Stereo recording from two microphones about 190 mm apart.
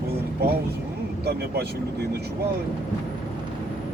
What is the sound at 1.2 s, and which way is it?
Speech, 60° right (ahead or behind).